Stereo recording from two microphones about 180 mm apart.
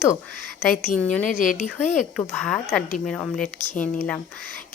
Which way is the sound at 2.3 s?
5° left (ahead or behind).